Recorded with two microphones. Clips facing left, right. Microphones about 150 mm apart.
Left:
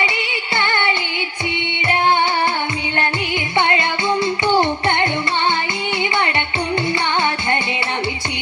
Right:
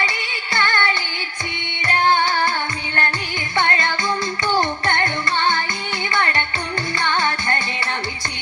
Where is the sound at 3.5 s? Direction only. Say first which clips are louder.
Left 2 dB; 15° left (ahead or behind).